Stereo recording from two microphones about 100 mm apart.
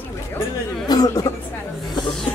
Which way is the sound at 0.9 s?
40° left (ahead or behind).